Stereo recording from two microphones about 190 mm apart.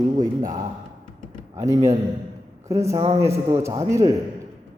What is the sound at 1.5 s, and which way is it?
A man's voice, 15° right (ahead or behind).